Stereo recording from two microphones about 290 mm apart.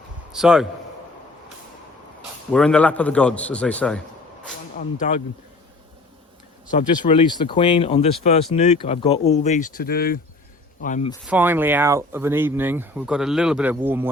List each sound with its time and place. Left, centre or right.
0.3 s a man's voice: centre
2.5 s a man's voice: centre
4.9 s speech: left
6.7 s speech: left
11.3 s speech: centre